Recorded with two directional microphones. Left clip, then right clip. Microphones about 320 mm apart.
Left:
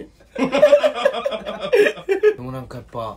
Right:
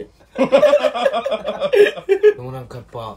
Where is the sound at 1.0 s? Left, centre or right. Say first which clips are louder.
Right 1 dB; centre.